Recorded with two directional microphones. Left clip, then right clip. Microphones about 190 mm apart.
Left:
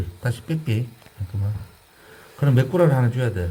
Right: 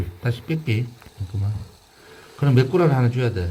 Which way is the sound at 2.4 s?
10° left (ahead or behind).